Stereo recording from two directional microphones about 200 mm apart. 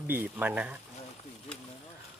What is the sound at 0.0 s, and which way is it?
Speech, 10° right (ahead or behind).